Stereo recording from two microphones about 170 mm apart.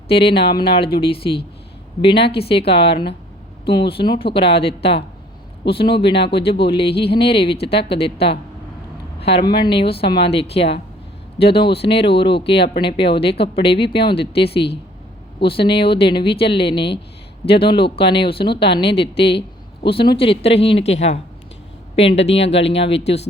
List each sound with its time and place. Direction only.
0.1 s speech: 30° left (ahead or behind)